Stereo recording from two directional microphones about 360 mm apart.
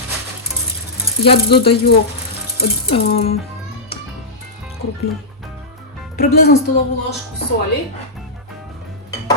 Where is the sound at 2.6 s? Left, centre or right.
Left.